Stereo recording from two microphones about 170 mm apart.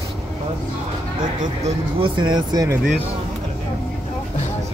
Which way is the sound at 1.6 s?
30° right (ahead or behind).